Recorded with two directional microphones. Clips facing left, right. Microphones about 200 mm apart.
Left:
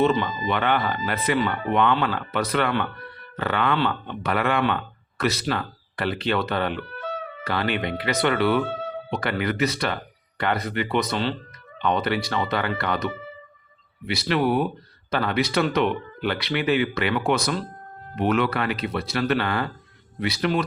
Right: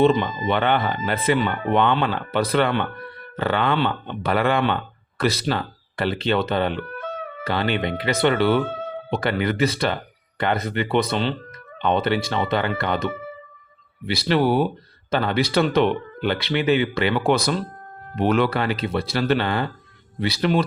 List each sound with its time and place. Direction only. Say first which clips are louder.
0.2 s speech: right 3 dB; 30° right (ahead or behind)
14.1 s speech: right 3 dB; 30° right (ahead or behind)